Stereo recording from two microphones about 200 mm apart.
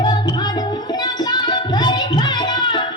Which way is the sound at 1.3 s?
20° left (ahead or behind).